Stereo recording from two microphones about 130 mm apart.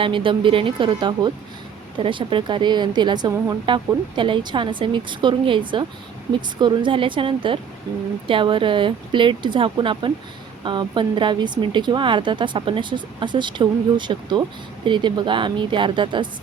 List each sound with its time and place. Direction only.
0.0 s a woman's voice: 40° right (ahead or behind)